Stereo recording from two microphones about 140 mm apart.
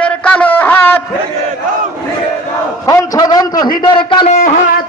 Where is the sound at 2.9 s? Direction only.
25° left (ahead or behind).